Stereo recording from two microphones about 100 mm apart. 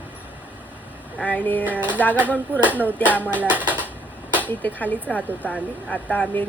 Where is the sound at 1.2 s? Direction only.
15° left (ahead or behind).